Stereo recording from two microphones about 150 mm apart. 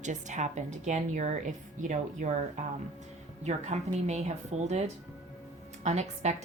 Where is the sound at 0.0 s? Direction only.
55° right (ahead or behind).